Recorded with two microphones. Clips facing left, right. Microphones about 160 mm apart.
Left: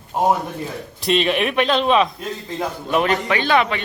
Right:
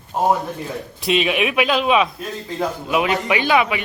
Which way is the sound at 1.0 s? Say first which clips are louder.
Left 1 dB; 5° right (ahead or behind).